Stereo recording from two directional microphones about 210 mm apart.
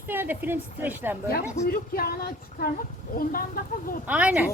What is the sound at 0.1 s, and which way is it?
A woman's voice, 10° right (ahead or behind).